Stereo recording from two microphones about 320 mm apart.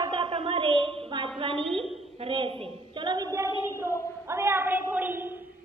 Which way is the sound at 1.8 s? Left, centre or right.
Centre.